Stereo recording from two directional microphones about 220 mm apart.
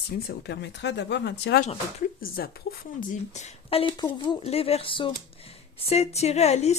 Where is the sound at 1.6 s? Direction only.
30° left (ahead or behind).